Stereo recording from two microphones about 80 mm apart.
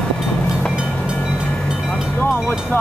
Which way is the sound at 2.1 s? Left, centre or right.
Left.